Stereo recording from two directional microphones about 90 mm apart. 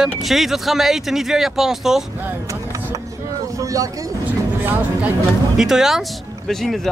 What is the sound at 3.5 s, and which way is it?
Vehicle, 40° right (ahead or behind).